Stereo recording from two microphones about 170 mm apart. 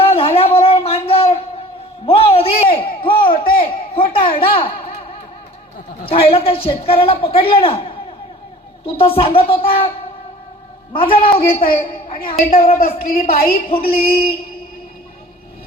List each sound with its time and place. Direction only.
0.0 s a sound: 35° left (ahead or behind)
6.1 s a man's voice: 35° left (ahead or behind)
9.0 s a man's voice: 35° left (ahead or behind)
10.9 s a man's voice: 30° left (ahead or behind)
12.7 s a man's voice: 60° left (ahead or behind)
13.9 s a man's voice: 35° left (ahead or behind)